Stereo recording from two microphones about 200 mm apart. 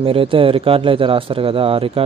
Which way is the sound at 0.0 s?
25° right (ahead or behind).